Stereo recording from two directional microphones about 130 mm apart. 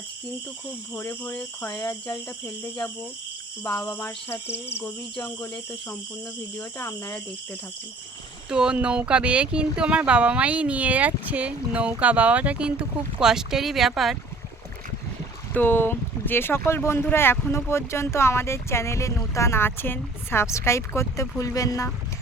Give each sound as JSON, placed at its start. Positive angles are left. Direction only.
{"t": 0.9, "sound": "speech", "side_deg": 15}
{"t": 3.9, "sound": "speech", "side_deg": 15}
{"t": 6.6, "sound": "speech", "side_deg": 15}
{"t": 8.4, "sound": "speech", "side_deg": -5}
{"t": 15.5, "sound": "speech", "side_deg": 15}